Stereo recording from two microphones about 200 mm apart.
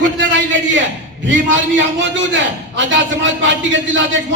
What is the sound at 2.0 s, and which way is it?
A man's voice, 65° right (ahead or behind).